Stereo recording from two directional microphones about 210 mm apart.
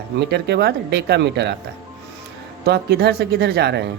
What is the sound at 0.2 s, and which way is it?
Speech, 50° right (ahead or behind).